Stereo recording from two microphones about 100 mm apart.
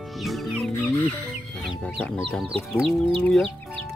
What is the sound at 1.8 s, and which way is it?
Speech, 10° left (ahead or behind).